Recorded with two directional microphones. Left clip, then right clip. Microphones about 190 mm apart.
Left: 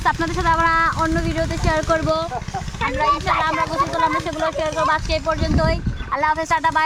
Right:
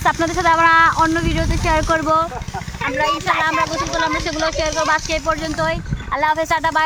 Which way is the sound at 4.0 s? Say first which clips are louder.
Even; 15° right (ahead or behind).